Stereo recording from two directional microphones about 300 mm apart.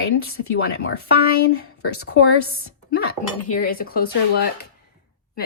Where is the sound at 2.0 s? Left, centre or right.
Left.